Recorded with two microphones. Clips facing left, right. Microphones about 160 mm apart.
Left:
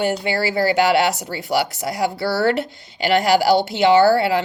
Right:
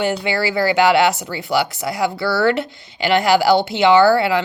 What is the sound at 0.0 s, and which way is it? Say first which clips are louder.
Speech: right 1 dB; 35° left (ahead or behind).